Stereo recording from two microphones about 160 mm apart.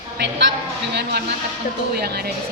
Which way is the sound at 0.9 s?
90° right.